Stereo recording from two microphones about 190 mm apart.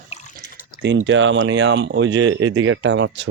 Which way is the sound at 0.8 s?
70° right (ahead or behind).